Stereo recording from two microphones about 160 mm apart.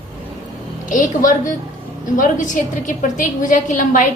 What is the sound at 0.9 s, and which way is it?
A woman's voice, 55° left (ahead or behind).